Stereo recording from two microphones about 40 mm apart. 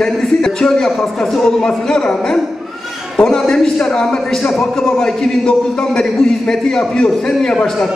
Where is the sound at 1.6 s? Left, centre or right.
Centre.